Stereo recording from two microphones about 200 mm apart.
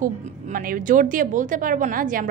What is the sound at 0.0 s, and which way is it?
A woman's voice, 45° right (ahead or behind).